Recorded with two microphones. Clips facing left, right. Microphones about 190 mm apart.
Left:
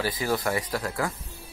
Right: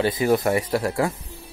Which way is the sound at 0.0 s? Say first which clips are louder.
Right 7 dB; 25° right (ahead or behind).